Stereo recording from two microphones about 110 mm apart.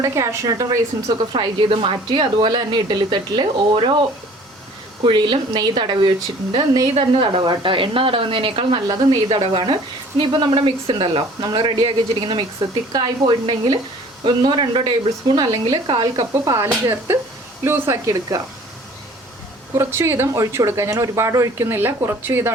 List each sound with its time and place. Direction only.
0.0 s speech: 30° right (ahead or behind)
1.7 s speech: 55° right (ahead or behind)
5.0 s a woman's voice: 50° right (ahead or behind)
6.9 s speech: 55° right (ahead or behind)
11.2 s a woman's voice: 30° right (ahead or behind)
11.5 s speech: 50° right (ahead or behind)
13.4 s a woman's voice: 50° right (ahead or behind)
16.6 s speech: 25° right (ahead or behind)
19.7 s speech: 25° right (ahead or behind)